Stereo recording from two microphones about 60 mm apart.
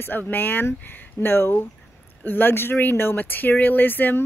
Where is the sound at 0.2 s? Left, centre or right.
Left.